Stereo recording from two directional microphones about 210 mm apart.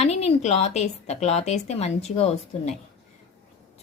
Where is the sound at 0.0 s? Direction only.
30° left (ahead or behind).